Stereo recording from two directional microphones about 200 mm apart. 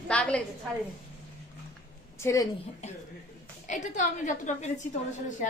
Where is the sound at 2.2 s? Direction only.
15° left (ahead or behind).